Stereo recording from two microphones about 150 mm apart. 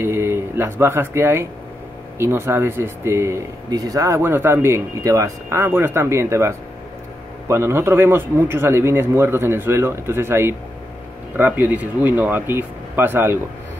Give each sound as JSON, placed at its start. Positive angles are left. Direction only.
{"t": 0.0, "sound": "speech", "side_deg": -15}